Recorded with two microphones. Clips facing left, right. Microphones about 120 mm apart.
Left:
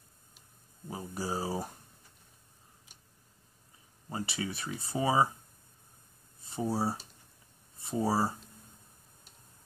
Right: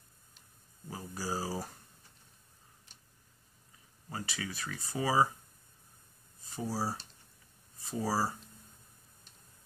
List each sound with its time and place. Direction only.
0.8 s speech: 20° left (ahead or behind)
4.1 s speech: 25° left (ahead or behind)
6.4 s speech: 20° left (ahead or behind)